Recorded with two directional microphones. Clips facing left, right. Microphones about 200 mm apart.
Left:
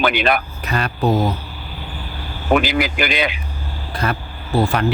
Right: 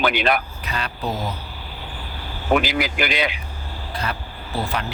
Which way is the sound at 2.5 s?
55° left (ahead or behind).